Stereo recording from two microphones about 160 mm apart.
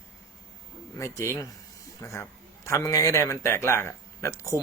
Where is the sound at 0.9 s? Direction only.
15° left (ahead or behind).